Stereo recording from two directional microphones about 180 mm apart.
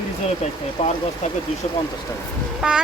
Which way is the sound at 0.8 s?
35° left (ahead or behind).